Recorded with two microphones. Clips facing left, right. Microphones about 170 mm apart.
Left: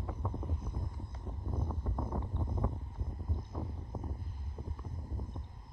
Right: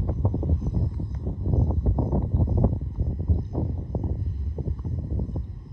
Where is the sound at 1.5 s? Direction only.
45° right (ahead or behind).